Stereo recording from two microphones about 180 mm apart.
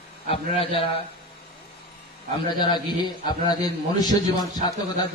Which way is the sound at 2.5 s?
25° left (ahead or behind).